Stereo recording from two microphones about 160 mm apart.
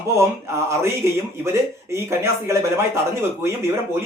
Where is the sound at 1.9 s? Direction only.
15° right (ahead or behind).